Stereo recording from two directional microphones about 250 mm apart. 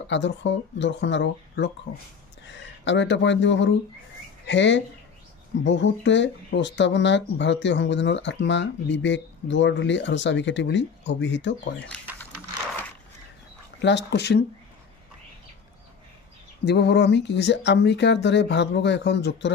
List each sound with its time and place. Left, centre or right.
0.1 s speech: left
13.7 s speech: left
16.6 s speech: left